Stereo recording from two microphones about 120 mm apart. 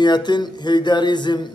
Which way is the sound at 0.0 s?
35° left (ahead or behind).